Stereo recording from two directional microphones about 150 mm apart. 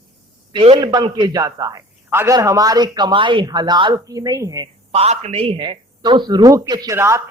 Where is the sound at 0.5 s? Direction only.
40° right (ahead or behind).